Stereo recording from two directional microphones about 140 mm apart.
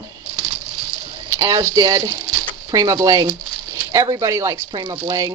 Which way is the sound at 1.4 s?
25° right (ahead or behind).